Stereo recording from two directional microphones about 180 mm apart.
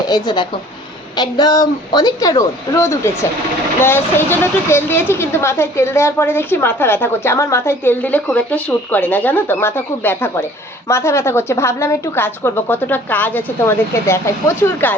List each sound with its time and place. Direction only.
0.1 s a woman's voice: 25° left (ahead or behind)